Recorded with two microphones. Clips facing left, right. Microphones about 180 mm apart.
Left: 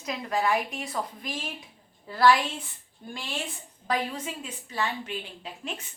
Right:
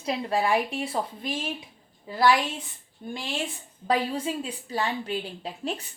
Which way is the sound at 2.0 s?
20° right (ahead or behind).